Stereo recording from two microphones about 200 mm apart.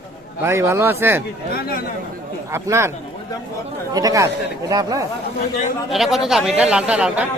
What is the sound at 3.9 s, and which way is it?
Speech, 15° right (ahead or behind).